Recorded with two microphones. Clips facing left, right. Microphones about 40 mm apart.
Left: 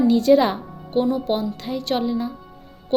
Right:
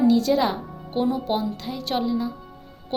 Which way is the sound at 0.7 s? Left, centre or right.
Centre.